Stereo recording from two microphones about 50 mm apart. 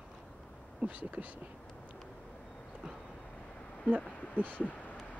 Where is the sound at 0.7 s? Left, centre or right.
Right.